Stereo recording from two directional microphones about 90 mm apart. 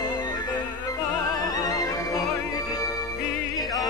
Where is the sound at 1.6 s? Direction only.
40° left (ahead or behind).